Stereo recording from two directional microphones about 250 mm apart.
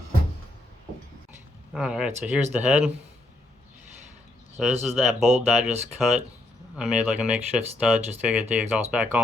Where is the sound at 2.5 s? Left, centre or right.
Centre.